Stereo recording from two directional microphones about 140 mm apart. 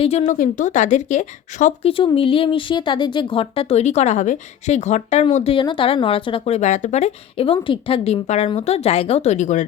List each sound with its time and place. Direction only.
0.0 s speech: 50° left (ahead or behind)
0.3 s speech: 70° left (ahead or behind)
2.1 s speech: 40° left (ahead or behind); by 5.2 s 55° left (ahead or behind)
5.3 s speech: 45° left (ahead or behind); by 9.6 s 60° left (ahead or behind)